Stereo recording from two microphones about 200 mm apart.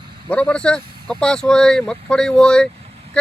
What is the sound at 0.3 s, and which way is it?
Speech, 5° left (ahead or behind).